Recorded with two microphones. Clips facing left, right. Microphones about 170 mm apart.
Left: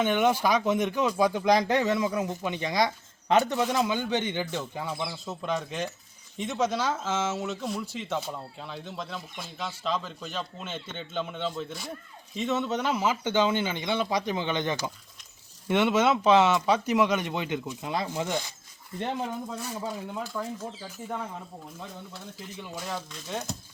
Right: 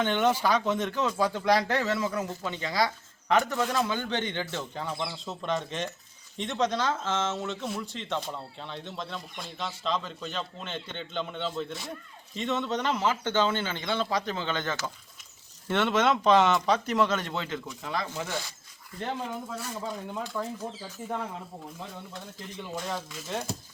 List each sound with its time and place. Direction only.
0.0 s speech: 10° left (ahead or behind)
19.8 s speech: centre (ahead or behind)
22.7 s speech: centre (ahead or behind)